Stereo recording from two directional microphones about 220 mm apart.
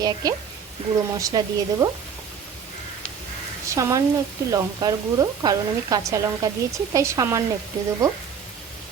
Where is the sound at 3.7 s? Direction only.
15° right (ahead or behind).